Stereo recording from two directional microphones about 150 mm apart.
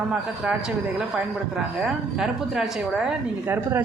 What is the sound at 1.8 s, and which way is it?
A woman's voice, 5° right (ahead or behind).